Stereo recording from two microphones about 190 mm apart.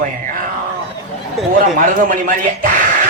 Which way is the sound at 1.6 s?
45° right (ahead or behind).